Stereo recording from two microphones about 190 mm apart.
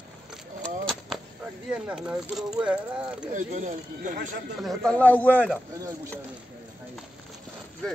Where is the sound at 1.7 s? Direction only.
5° right (ahead or behind).